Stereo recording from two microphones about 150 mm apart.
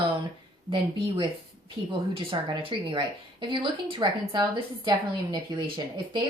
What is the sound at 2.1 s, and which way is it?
Speech, 35° right (ahead or behind).